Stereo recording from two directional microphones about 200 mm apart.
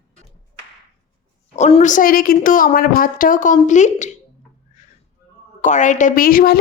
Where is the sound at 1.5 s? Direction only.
35° left (ahead or behind).